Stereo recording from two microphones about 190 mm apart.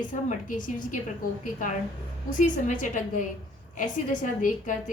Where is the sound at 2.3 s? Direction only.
40° left (ahead or behind).